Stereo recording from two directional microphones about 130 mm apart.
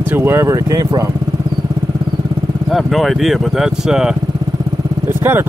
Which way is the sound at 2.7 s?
Centre (ahead or behind).